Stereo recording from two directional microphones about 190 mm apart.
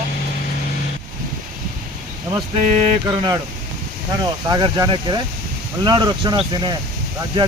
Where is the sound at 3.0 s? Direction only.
25° right (ahead or behind).